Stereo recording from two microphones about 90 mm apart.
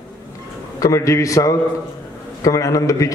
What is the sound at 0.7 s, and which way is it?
A man's voice, 40° left (ahead or behind).